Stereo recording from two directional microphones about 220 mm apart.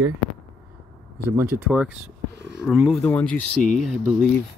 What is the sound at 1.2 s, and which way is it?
Speech, 10° right (ahead or behind).